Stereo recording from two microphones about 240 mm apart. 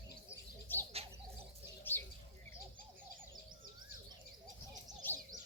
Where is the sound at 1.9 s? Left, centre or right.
Centre.